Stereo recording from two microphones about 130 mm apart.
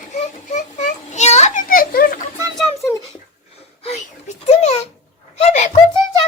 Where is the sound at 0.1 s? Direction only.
70° left (ahead or behind); by 2.2 s 90° left.